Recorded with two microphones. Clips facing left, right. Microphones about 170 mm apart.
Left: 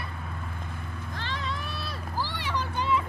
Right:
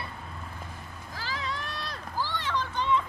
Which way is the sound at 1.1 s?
5° right (ahead or behind).